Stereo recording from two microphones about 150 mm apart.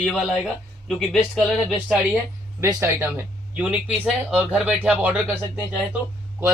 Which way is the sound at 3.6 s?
5° right (ahead or behind).